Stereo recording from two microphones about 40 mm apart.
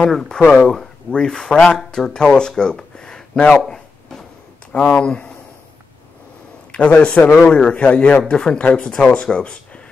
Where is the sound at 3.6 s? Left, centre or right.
Centre.